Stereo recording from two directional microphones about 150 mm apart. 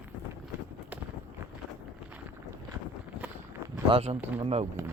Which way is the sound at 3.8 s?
40° right (ahead or behind).